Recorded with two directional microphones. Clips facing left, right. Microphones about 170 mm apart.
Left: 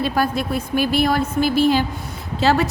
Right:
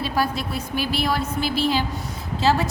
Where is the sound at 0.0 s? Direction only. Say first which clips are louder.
Left 4 dB; 55° left (ahead or behind).